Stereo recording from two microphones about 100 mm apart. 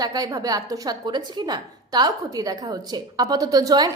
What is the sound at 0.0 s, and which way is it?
A woman's voice, 40° right (ahead or behind).